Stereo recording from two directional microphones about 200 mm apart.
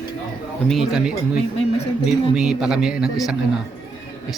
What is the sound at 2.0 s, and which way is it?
Speech, 5° right (ahead or behind).